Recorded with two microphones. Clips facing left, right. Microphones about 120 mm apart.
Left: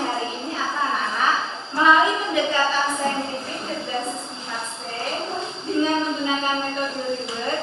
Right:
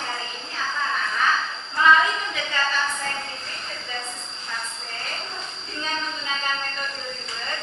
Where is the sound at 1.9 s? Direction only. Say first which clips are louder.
Left 3 dB; 20° left (ahead or behind).